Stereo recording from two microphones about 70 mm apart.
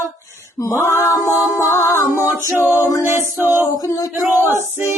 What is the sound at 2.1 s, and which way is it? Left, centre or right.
Male singing, right.